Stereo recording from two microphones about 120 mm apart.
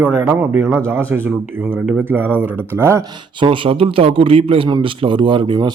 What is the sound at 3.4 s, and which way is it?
Speech, 45° right (ahead or behind).